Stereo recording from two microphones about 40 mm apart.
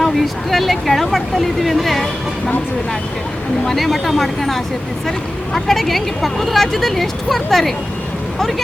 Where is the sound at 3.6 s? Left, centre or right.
Centre.